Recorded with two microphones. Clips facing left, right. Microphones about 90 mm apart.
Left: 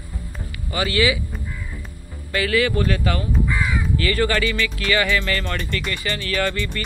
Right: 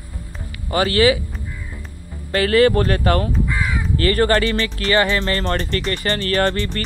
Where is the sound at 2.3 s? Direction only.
40° right (ahead or behind).